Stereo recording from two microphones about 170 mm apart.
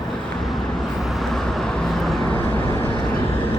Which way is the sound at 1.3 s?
Centre (ahead or behind).